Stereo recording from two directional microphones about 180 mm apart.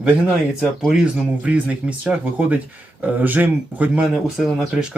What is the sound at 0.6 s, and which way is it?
Speech, centre (ahead or behind).